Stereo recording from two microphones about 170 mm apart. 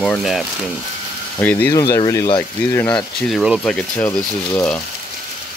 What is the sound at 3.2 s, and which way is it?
Speech, centre (ahead or behind).